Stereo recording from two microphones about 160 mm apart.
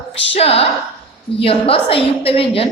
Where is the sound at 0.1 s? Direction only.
35° left (ahead or behind).